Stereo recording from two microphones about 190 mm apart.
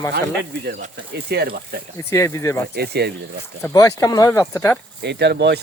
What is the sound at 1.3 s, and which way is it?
Speech, 55° right (ahead or behind).